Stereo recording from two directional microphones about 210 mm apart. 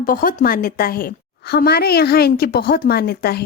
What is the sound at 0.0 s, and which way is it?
A woman's voice, 40° left (ahead or behind).